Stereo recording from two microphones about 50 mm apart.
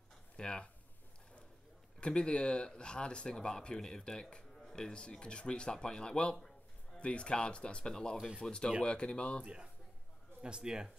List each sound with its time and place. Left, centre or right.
0.4 s speech: centre
2.0 s speech: centre
9.4 s speech: right